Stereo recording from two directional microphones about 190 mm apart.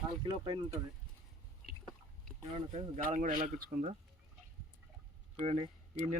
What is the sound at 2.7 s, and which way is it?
Speech, 35° right (ahead or behind).